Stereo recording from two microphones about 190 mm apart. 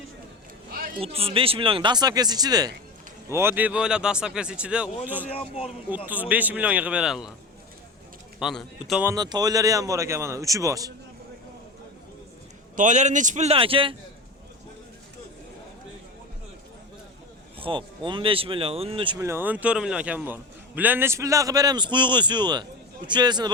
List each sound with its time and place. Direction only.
1.0 s a man's voice: 30° right (ahead or behind); by 5.3 s 10° right (ahead or behind)
5.3 s a man's voice: 30° left (ahead or behind)
6.1 s a man's voice: 10° right (ahead or behind)
8.4 s speech: centre (ahead or behind)
9.0 s a man's voice: 20° right (ahead or behind)
12.7 s a man's voice: 40° right (ahead or behind)
17.6 s speech: 25° right (ahead or behind)
19.2 s a man's voice: 10° right (ahead or behind)